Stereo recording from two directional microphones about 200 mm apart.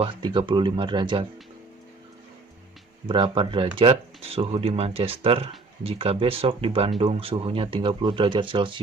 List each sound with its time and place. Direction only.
0.0 s speech: 25° right (ahead or behind)
3.1 s speech: 25° right (ahead or behind)